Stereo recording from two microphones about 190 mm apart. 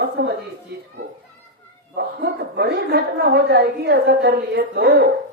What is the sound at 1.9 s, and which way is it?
A woman's voice, 60° right (ahead or behind).